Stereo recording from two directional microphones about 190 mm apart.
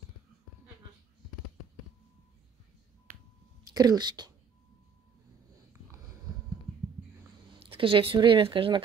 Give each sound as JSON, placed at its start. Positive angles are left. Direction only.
{"t": 3.7, "sound": "speech", "side_deg": -20}
{"t": 7.5, "sound": "speech", "side_deg": -30}